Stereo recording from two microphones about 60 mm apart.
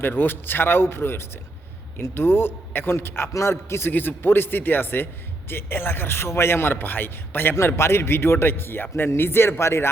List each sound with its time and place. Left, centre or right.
0.0 s a man's voice: left
7.8 s a man's voice: left